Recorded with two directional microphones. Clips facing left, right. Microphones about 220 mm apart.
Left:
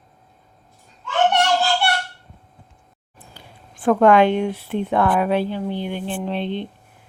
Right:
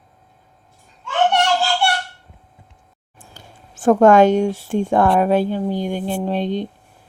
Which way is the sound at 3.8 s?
45° right (ahead or behind).